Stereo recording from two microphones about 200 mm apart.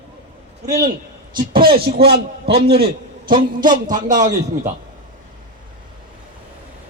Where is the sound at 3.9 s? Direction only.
40° right (ahead or behind).